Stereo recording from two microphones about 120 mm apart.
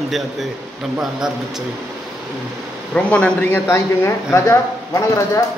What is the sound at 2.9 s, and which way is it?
Speech, 10° left (ahead or behind).